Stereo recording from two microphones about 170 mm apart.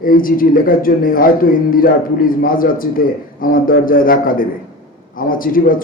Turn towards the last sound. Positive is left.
turn(degrees=55)  # may be behind; listen again after turning